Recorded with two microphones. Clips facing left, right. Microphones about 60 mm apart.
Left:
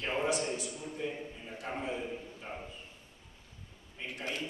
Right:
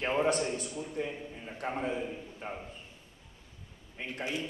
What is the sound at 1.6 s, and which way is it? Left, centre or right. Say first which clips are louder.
Speech: right 4 dB; right.